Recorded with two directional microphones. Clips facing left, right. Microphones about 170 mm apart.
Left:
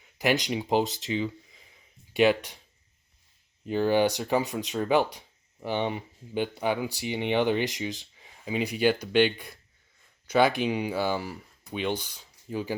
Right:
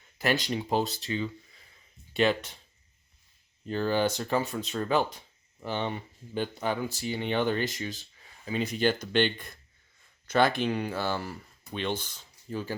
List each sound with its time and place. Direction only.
0.2 s speech: 15° left (ahead or behind)
3.7 s speech: 15° left (ahead or behind)